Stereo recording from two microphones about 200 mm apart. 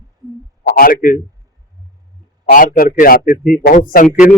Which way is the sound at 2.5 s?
45° left (ahead or behind).